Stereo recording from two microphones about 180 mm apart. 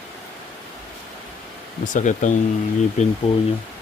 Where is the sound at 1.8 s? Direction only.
45° left (ahead or behind).